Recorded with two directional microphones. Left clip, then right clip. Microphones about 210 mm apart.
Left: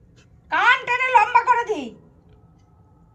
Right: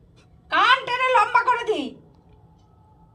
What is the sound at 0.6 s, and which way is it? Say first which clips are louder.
A woman's voice: left 1 dB; 25° right (ahead or behind).